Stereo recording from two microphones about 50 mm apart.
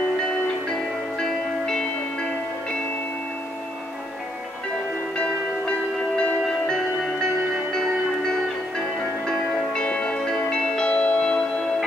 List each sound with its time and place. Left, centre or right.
1.2 s music: centre
5.1 s music: centre
6.4 s music: centre